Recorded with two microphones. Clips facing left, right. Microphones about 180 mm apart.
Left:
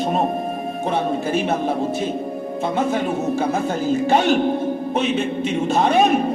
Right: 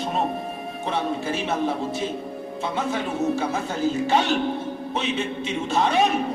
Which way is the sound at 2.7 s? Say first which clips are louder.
Left 5 dB; 50° left (ahead or behind).